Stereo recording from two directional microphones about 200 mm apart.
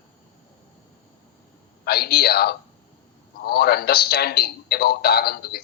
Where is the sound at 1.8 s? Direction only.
50° left (ahead or behind).